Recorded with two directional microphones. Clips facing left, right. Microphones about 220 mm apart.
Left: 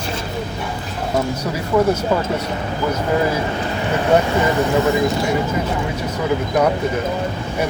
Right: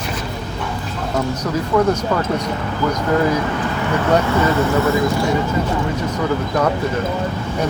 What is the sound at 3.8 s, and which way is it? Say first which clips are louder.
Speech: left 1 dB; 20° left (ahead or behind).